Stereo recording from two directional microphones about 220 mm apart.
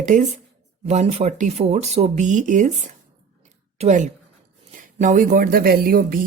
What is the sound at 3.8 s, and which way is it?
Speech, 35° right (ahead or behind).